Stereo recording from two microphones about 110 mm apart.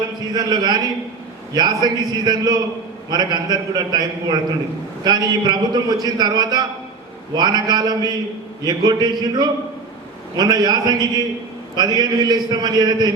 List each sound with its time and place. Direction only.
0.3 s a man's voice: 40° right (ahead or behind)